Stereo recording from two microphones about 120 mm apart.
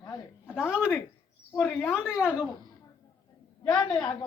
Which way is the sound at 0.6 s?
5° right (ahead or behind).